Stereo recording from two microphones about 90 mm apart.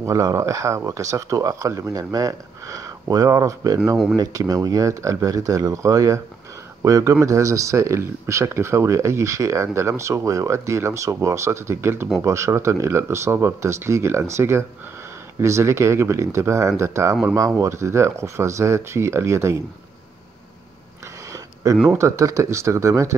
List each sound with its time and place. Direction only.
0.0 s speech: 35° right (ahead or behind)
21.9 s speech: 35° right (ahead or behind)